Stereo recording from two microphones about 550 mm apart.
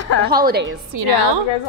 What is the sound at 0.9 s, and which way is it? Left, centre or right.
Speech, right.